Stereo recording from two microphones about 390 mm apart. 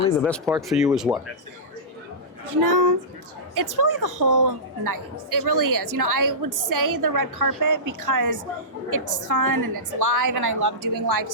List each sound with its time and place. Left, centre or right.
0.2 s speech: centre
2.5 s a woman's voice: right